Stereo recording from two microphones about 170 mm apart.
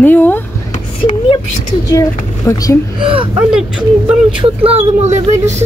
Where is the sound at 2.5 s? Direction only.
20° left (ahead or behind).